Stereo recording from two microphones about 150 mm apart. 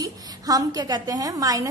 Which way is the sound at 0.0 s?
25° right (ahead or behind).